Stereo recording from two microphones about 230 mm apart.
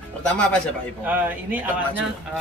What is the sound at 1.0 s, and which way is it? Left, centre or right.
Speech, centre.